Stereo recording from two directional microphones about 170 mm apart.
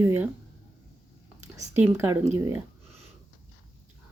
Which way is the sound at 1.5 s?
15° right (ahead or behind).